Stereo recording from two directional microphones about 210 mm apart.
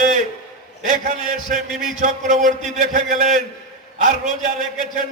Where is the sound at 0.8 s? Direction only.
35° right (ahead or behind).